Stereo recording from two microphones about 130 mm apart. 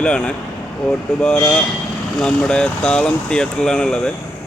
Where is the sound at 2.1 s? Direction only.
5° left (ahead or behind).